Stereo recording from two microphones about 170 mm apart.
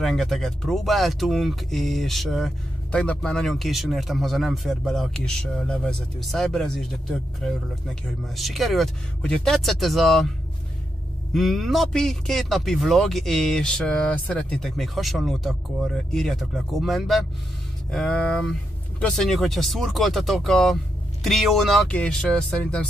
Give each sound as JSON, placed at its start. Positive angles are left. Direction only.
{"t": 0.0, "sound": "speech", "side_deg": 0}
{"t": 11.3, "sound": "speech", "side_deg": 0}